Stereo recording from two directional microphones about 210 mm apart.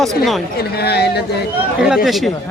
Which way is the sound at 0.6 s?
50° left (ahead or behind).